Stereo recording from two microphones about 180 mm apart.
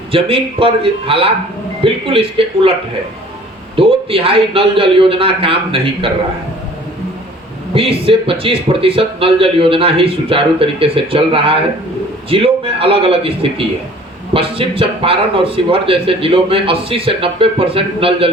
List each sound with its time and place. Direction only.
0.1 s a man's voice: 30° right (ahead or behind)
3.8 s a man's voice: 30° right (ahead or behind)
7.7 s a man's voice: 30° right (ahead or behind)